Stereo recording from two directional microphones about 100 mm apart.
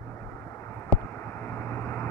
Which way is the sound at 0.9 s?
25° left (ahead or behind).